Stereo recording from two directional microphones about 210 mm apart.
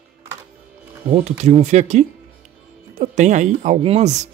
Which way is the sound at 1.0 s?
25° right (ahead or behind).